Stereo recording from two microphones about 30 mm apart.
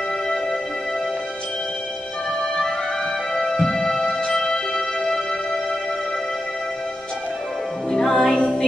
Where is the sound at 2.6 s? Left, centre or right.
Centre.